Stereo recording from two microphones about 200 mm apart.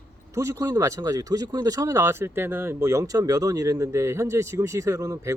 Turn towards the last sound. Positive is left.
turn(degrees=-15)  # may be behind; listen again after turning